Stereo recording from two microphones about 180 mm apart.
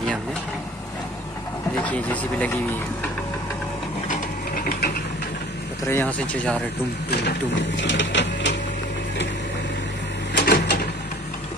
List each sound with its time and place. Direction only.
1.8 s speech: 5° left (ahead or behind)
4.1 s gears: 55° left (ahead or behind)
5.9 s speech: 10° left (ahead or behind)
7.1 s speech: 75° left (ahead or behind)
10.3 s a sound: 65° left (ahead or behind)